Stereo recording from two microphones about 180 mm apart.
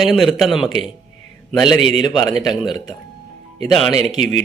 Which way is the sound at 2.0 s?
20° left (ahead or behind).